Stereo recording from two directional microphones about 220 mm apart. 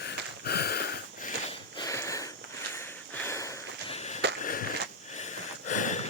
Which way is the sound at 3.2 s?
10° left (ahead or behind).